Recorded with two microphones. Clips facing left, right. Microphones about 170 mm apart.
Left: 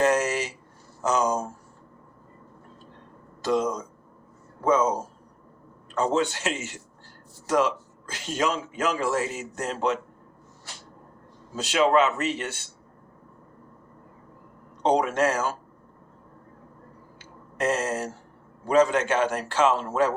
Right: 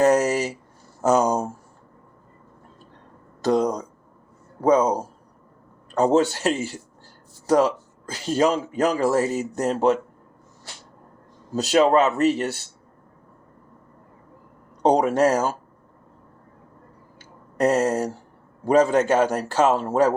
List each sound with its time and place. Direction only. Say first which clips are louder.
0.0 s a sound: right 5 dB; 35° right (ahead or behind)
3.4 s a sound: right 4 dB; 40° right (ahead or behind)
5.9 s speech: right 6 dB; 40° right (ahead or behind)
11.5 s speech: right 4 dB; 40° right (ahead or behind)
14.8 s speech: right 4 dB; 40° right (ahead or behind)
17.6 s speech: right 6 dB; 35° right (ahead or behind)